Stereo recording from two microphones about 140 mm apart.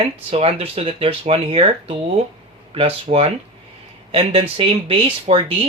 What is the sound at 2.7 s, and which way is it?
Speech, 45° right (ahead or behind).